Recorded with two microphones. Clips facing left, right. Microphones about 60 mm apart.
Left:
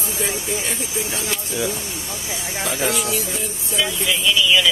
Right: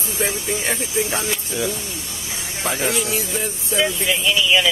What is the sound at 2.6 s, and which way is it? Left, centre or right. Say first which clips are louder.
Speech: even; right.